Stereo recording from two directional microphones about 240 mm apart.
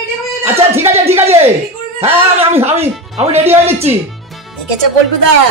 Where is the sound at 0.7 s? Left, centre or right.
Centre.